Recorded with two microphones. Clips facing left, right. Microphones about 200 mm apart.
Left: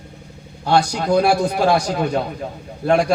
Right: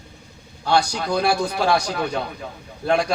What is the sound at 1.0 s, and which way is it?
A man's voice, 45° left (ahead or behind).